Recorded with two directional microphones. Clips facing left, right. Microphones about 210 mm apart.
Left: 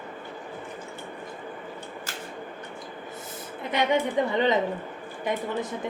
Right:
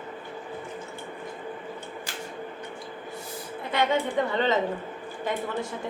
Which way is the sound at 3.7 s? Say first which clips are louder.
Left 1 dB; 15° left (ahead or behind).